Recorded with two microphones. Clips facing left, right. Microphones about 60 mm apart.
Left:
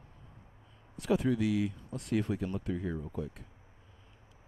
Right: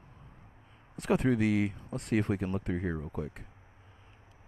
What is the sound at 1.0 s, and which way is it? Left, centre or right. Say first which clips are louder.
Speech: right 2 dB; right.